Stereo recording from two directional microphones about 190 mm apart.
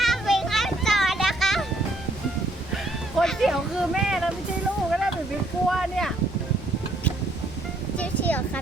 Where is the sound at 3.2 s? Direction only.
Centre (ahead or behind).